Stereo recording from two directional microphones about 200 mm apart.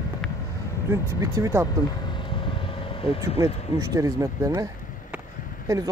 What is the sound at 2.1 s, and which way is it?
Vehicle, 25° left (ahead or behind).